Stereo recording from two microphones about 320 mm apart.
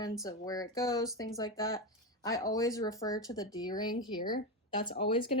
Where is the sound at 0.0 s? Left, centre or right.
Centre.